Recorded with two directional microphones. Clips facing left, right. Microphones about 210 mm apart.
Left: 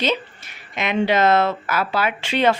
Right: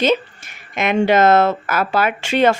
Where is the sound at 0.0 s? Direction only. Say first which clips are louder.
Right 6 dB; 45° right (ahead or behind).